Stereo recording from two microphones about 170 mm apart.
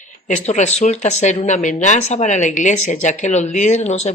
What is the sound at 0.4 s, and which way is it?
Speech, 40° left (ahead or behind).